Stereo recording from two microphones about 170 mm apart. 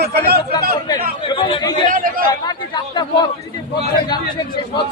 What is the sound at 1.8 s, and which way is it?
Speech, 55° right (ahead or behind).